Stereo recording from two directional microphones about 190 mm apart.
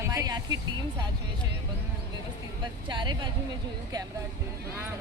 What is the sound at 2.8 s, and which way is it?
Speech, 25° right (ahead or behind).